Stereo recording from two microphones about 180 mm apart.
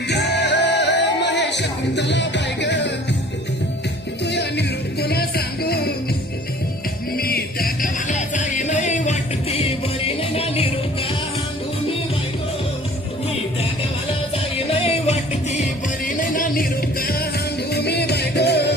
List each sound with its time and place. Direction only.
0.1 s music: 70° left (ahead or behind)
4.2 s music: 70° left (ahead or behind)
7.1 s music: 60° left (ahead or behind); by 10.7 s 35° left (ahead or behind)
14.8 s music: 35° left (ahead or behind); by 18.7 s 65° left (ahead or behind)